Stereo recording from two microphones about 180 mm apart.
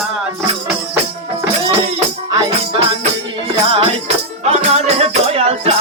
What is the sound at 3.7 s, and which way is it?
Music, 35° right (ahead or behind).